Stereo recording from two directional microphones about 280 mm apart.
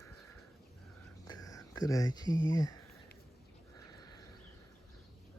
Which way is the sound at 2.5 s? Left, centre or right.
Centre.